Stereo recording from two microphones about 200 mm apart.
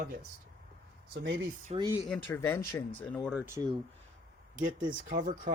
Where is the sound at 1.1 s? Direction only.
60° right (ahead or behind).